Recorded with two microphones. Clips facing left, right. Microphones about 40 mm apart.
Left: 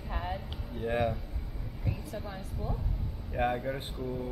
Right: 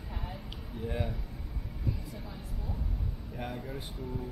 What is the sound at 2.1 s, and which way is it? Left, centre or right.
Speech, left.